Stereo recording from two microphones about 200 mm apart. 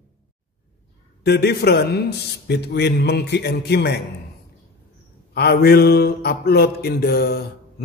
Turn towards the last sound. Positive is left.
turn(degrees=50)  # may be behind; listen again after turning